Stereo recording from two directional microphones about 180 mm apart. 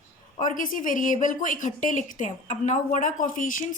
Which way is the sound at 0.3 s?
45° left (ahead or behind).